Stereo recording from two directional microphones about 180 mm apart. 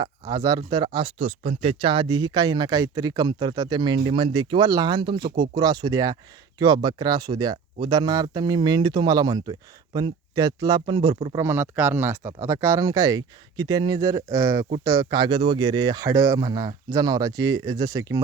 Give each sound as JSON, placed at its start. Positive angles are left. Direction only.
{"t": 0.0, "sound": "speech", "side_deg": -20}
{"t": 0.9, "sound": "speech", "side_deg": -35}
{"t": 11.3, "sound": "speech", "side_deg": -10}